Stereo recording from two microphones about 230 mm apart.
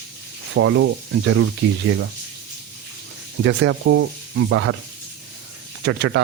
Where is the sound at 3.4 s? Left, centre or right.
Right.